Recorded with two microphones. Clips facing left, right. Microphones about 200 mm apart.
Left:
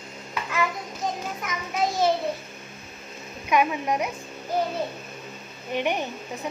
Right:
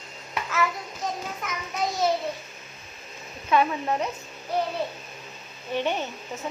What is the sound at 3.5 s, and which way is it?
Speech, 15° left (ahead or behind).